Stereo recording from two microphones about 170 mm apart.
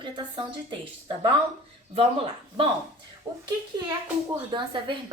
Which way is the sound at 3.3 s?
20° right (ahead or behind).